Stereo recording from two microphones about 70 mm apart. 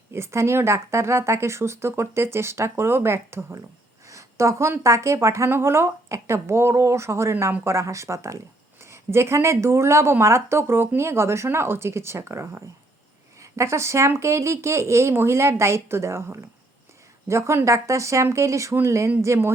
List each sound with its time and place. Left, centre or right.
0.1 s speech: right
4.1 s a sound: right
4.8 s speech: right